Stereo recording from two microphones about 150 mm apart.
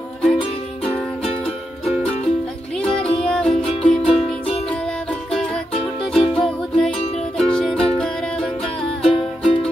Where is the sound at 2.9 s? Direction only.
35° left (ahead or behind).